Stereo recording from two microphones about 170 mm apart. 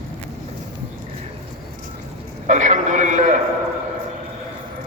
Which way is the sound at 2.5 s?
45° right (ahead or behind).